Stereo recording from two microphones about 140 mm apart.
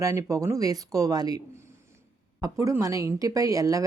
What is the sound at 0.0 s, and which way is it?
Speech, 25° right (ahead or behind).